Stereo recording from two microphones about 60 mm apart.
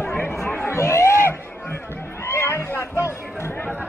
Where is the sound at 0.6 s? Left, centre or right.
Left.